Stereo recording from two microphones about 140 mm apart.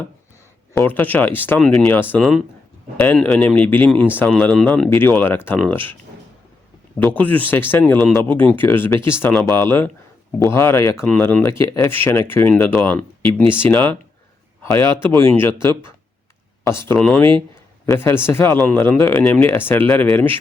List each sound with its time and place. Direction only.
0.7 s speech: 15° left (ahead or behind)
1.9 s speech: 15° left (ahead or behind)
7.0 s speech: 10° left (ahead or behind)
14.6 s a sound: 20° left (ahead or behind)
15.2 s speech: 15° left (ahead or behind)